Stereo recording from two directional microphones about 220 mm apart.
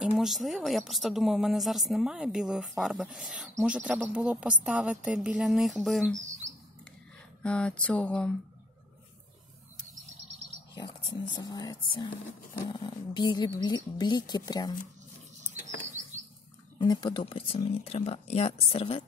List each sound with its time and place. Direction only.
0.0 s a woman's voice: centre (ahead or behind)
6.1 s bird: 35° right (ahead or behind)
7.4 s a woman's voice: 5° left (ahead or behind)
11.3 s speech: 20° left (ahead or behind)
16.7 s speech: 20° left (ahead or behind)